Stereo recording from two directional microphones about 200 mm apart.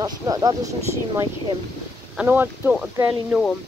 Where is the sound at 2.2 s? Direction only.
10° right (ahead or behind).